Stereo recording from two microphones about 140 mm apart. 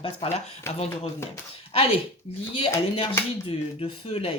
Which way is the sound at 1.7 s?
40° left (ahead or behind).